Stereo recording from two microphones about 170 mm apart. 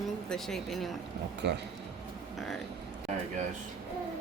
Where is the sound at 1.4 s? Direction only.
85° right.